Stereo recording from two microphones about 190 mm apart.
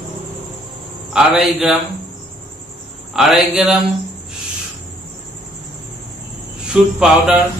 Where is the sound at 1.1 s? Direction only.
5° right (ahead or behind).